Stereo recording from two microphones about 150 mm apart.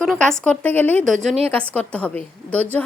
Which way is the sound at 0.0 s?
5° left (ahead or behind).